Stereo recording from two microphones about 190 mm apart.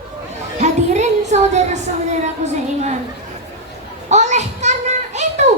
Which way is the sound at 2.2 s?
35° right (ahead or behind).